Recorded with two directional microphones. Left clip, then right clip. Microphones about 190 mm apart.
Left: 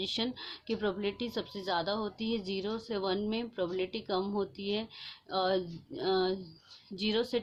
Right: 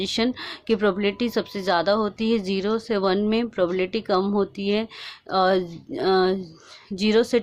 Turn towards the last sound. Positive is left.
turn(degrees=-35)  # may be behind; listen again after turning